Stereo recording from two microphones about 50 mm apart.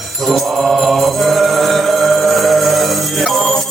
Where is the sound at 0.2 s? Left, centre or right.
Centre.